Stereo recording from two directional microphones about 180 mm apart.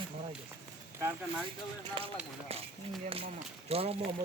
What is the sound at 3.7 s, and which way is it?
Speech, 35° right (ahead or behind).